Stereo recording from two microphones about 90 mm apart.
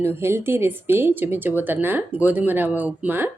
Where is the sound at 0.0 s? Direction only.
25° right (ahead or behind).